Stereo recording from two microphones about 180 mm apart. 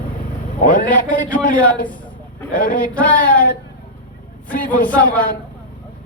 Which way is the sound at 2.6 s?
50° left (ahead or behind).